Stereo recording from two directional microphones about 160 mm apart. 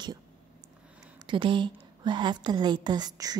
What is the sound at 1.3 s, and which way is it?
A woman's voice, 30° right (ahead or behind).